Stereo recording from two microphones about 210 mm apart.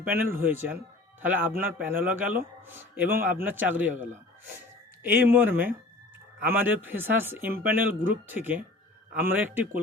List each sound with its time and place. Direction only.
0.0 s speech: 10° right (ahead or behind)